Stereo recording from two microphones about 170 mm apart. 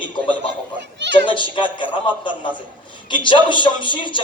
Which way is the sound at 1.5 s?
30° left (ahead or behind).